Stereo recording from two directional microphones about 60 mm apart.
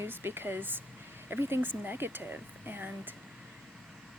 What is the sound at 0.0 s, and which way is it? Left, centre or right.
A woman's voice, right.